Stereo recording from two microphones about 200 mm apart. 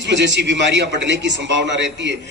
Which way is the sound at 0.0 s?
60° right (ahead or behind).